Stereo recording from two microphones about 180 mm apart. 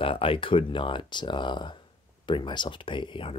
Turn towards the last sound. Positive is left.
turn(degrees=30)  # may be behind; listen again after turning